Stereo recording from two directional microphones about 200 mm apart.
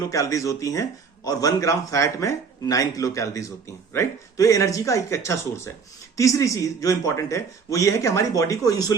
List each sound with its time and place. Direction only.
0.1 s speech: 15° left (ahead or behind)